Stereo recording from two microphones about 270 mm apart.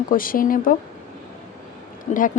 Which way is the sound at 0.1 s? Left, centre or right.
Left.